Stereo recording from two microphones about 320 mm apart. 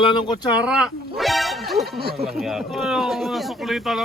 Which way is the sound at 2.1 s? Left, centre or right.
Centre.